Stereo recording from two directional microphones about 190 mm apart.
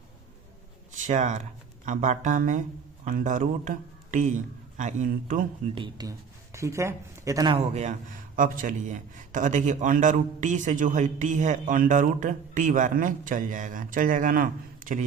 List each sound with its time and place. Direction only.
0.9 s a man's voice: 40° right (ahead or behind)
5.7 s speech: 25° right (ahead or behind)
7.7 s a man's voice: 35° right (ahead or behind)